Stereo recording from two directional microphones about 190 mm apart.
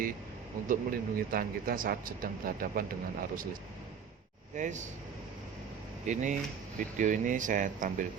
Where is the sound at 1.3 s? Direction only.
50° right (ahead or behind).